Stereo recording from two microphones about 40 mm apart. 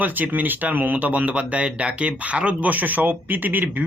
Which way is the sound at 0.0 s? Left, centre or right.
Right.